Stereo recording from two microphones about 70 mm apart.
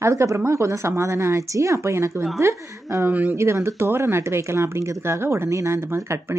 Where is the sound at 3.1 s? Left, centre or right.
Right.